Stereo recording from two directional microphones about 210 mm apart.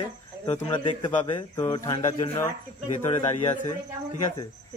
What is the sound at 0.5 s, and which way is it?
A man's voice, 25° left (ahead or behind).